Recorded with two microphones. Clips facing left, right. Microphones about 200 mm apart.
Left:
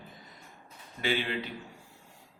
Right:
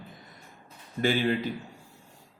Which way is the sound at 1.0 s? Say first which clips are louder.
Right 6 dB; 45° right (ahead or behind).